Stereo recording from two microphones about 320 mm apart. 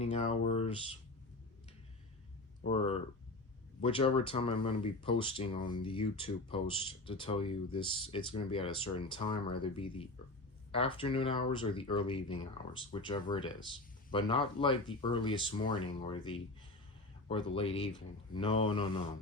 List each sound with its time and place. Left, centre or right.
0.0 s speech: left
2.7 s speech: centre